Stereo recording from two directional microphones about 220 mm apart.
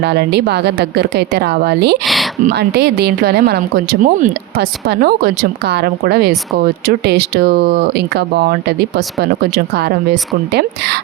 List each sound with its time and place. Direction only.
0.0 s speech: 50° right (ahead or behind)
10.5 s speech: 50° right (ahead or behind)